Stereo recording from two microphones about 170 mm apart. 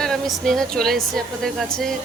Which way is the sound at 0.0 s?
Centre (ahead or behind).